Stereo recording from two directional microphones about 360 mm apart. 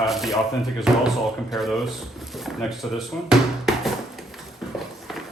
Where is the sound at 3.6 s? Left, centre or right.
Centre.